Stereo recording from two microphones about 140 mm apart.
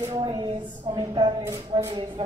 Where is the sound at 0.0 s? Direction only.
30° right (ahead or behind).